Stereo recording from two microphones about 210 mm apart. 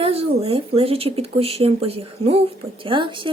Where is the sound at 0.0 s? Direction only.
25° right (ahead or behind).